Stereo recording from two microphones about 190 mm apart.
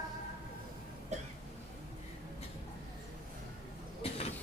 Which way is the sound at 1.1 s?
35° right (ahead or behind).